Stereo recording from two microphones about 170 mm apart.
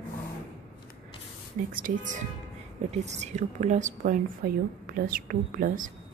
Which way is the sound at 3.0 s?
40° right (ahead or behind).